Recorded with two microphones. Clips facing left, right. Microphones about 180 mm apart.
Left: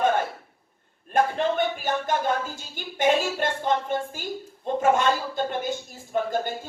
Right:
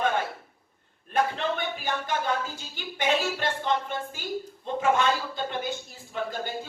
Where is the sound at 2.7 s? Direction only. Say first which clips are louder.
Left 4 dB; 50° left (ahead or behind).